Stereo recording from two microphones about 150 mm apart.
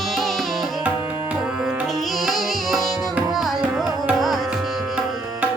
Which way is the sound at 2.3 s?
Centre (ahead or behind).